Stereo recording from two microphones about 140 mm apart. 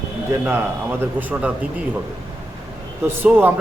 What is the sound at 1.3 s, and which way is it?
Speech, 10° right (ahead or behind).